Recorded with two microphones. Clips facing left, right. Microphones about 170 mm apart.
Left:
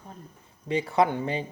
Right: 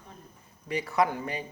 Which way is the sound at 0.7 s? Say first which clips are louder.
Left 3 dB; 25° left (ahead or behind).